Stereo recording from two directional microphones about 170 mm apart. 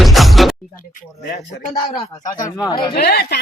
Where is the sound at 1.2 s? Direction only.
75° left (ahead or behind).